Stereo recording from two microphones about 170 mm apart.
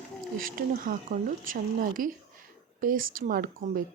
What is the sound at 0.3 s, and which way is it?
Speech, 55° right (ahead or behind).